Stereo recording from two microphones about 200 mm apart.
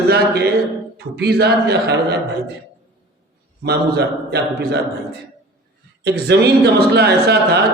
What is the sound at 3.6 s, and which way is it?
A man's voice, 55° right (ahead or behind).